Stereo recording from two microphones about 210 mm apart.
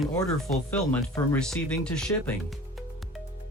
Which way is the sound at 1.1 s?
5° left (ahead or behind).